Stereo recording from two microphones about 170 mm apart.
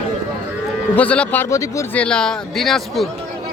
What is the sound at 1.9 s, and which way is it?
Speech, 5° left (ahead or behind).